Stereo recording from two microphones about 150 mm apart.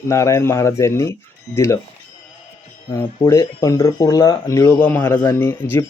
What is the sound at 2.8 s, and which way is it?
Speech, 25° left (ahead or behind).